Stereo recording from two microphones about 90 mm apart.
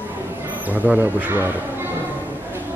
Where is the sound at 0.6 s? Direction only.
20° right (ahead or behind).